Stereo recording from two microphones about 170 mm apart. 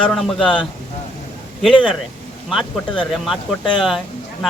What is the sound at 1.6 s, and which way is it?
Speech, 5° right (ahead or behind).